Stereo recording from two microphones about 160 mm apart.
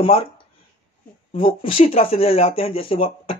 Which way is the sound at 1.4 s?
35° left (ahead or behind).